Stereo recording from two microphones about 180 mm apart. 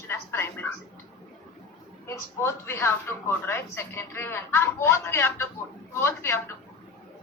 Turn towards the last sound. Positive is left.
turn(degrees=15)  # may be behind; listen again after turning